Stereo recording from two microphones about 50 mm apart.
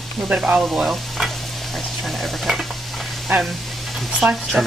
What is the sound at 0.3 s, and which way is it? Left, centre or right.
Speech, right.